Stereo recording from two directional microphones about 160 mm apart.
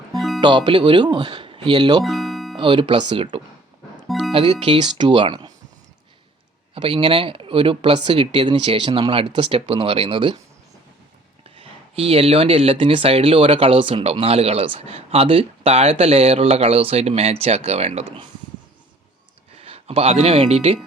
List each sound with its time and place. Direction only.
0.4 s speech: 30° right (ahead or behind)
2.0 s music: centre (ahead or behind)
2.6 s speech: 30° right (ahead or behind)
6.7 s speech: 35° right (ahead or behind)
11.5 s speech: 35° right (ahead or behind)
19.5 s speech: 35° right (ahead or behind)